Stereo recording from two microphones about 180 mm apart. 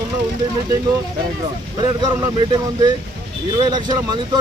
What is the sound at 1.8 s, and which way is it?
Speech, 20° right (ahead or behind).